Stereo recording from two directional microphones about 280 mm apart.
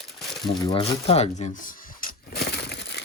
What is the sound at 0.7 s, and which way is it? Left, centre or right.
Speech, left.